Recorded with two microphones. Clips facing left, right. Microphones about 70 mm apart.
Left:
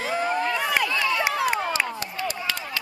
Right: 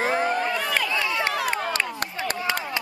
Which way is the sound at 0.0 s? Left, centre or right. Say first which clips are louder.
Right 3 dB; right.